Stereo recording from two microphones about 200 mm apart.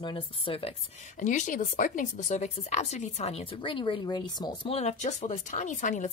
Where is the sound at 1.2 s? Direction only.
40° left (ahead or behind).